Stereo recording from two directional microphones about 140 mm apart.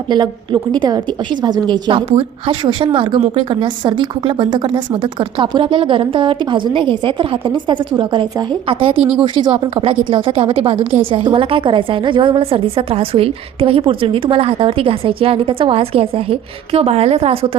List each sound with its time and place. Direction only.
0.1 s a woman's voice: 35° right (ahead or behind)
9.0 s speech: 5° right (ahead or behind)
9.2 s a woman's voice: 35° right (ahead or behind)